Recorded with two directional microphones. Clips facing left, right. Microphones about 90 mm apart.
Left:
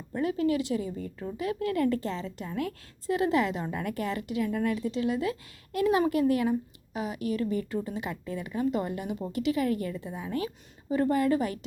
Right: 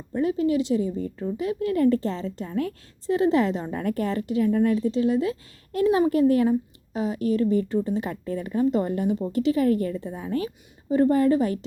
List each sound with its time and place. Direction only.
0.1 s a woman's voice: 25° right (ahead or behind)